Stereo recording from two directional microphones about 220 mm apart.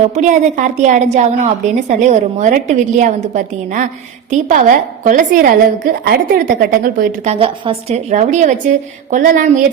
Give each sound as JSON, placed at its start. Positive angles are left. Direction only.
{"t": 0.0, "sound": "a woman's voice", "side_deg": -35}
{"t": 7.3, "sound": "a woman's voice", "side_deg": -25}